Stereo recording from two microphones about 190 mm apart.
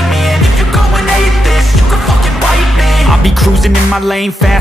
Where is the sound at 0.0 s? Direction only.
Centre (ahead or behind).